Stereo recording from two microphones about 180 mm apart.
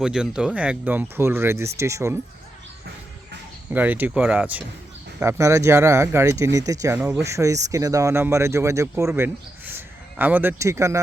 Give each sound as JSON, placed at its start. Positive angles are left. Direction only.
{"t": 0.0, "sound": "speech", "side_deg": -5}
{"t": 3.7, "sound": "speech", "side_deg": -10}